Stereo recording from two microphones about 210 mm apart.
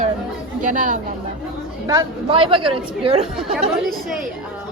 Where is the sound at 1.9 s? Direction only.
20° right (ahead or behind).